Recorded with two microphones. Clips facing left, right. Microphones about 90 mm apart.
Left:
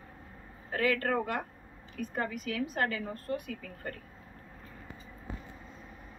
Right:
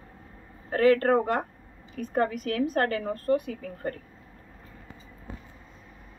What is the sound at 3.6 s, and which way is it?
Speech, 40° right (ahead or behind).